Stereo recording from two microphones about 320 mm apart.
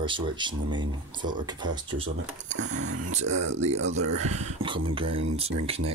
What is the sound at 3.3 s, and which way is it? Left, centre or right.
Speech, right.